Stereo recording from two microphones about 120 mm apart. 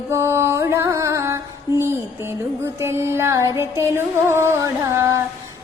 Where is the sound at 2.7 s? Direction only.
20° right (ahead or behind).